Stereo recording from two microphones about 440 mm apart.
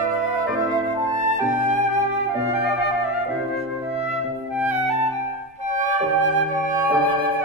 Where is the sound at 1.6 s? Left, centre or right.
Centre.